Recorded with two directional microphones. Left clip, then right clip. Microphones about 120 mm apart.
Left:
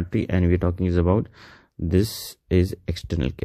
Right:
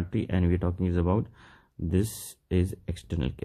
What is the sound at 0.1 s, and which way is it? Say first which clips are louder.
Speech: left 7 dB; 45° left (ahead or behind).